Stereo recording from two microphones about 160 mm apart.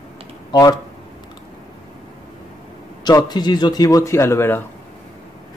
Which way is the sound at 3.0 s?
25° left (ahead or behind).